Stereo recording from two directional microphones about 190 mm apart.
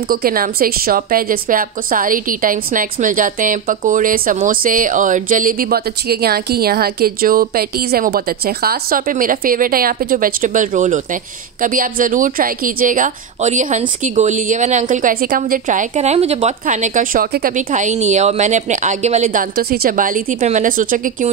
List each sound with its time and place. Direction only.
0.1 s a woman's voice: 50° right (ahead or behind)